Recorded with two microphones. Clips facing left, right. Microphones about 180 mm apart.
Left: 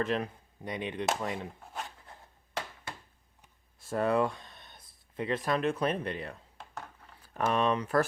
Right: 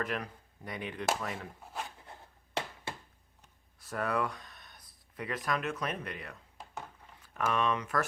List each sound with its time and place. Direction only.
0.0 s speech: 25° left (ahead or behind)
1.6 s a sound: centre (ahead or behind)
3.8 s speech: 25° left (ahead or behind)